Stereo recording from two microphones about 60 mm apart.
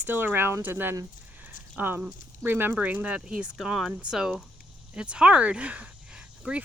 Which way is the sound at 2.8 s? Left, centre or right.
Right.